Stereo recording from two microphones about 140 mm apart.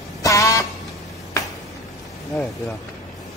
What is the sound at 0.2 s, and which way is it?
Vehicle horn, 25° left (ahead or behind).